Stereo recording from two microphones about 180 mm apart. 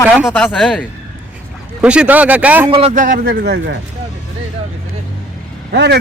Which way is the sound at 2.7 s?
35° right (ahead or behind).